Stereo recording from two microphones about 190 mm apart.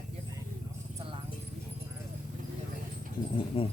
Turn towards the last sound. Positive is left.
turn(degrees=30)  # may be behind; listen again after turning